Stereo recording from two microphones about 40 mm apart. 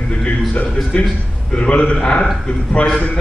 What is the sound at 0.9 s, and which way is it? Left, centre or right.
A man's voice, left.